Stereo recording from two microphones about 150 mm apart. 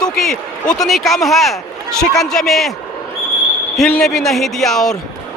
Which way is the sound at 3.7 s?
5° left (ahead or behind).